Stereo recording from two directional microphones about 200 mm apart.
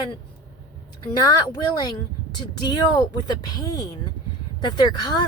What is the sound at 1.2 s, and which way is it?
A woman's voice, 20° left (ahead or behind).